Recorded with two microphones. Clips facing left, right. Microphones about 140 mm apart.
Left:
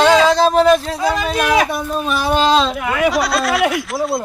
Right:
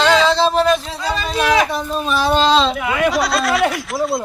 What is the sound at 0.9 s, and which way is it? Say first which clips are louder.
Speech: left 4 dB; 10° left (ahead or behind).